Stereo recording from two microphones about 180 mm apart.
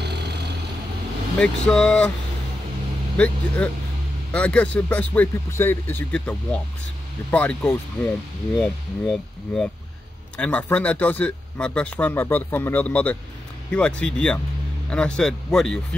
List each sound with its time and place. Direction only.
0.0 s vehicle: 65° right (ahead or behind)
1.4 s speech: 5° left (ahead or behind)
3.2 s speech: 5° left (ahead or behind)